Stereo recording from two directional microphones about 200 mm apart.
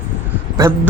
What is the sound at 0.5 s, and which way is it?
Speech, 15° right (ahead or behind).